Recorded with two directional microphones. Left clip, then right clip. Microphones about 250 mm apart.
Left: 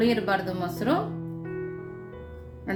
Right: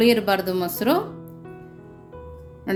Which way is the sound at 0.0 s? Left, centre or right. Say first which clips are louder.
Right 6 dB; right.